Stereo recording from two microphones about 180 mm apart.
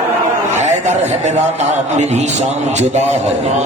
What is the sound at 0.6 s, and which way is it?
A man's voice, 40° right (ahead or behind).